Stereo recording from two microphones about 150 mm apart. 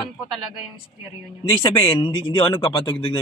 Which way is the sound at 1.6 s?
30° left (ahead or behind).